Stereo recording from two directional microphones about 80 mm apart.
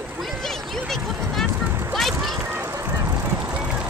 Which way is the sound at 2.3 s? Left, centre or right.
Right.